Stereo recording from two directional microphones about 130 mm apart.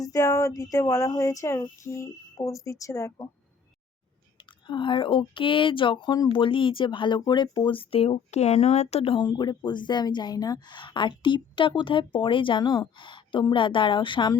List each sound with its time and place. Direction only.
0.0 s speech: 25° left (ahead or behind)
4.6 s a woman's voice: 40° left (ahead or behind); by 9.1 s 55° left (ahead or behind)
9.1 s a woman's voice: 35° left (ahead or behind)